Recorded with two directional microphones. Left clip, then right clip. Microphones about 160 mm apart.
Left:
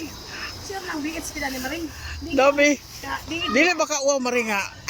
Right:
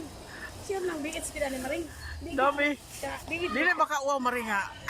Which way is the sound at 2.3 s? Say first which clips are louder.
Left 9 dB; 20° left (ahead or behind).